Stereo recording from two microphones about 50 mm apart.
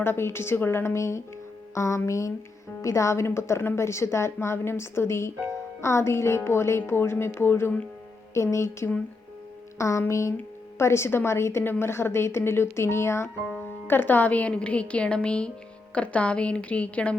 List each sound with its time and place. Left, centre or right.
0.0 s speech: left
1.7 s a sound: left
2.0 s mantra: left
2.8 s a woman's voice: left
8.3 s music: left
9.7 s a sound: left
10.1 s music: left
10.8 s speech: left
13.8 s speech: left
14.5 s a woman's voice: left